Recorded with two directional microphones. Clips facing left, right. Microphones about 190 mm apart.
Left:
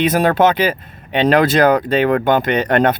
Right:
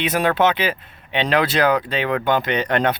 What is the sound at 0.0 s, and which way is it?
Speech, 40° left (ahead or behind).